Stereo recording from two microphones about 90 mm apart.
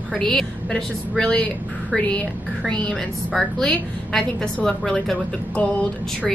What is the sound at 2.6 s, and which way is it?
A woman's voice, 10° left (ahead or behind).